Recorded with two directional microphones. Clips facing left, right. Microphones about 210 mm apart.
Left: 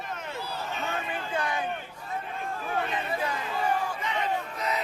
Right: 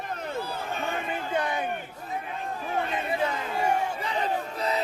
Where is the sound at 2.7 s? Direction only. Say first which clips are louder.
Right 3 dB; 25° right (ahead or behind).